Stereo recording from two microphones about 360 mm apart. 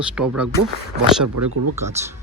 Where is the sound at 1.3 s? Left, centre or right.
Right.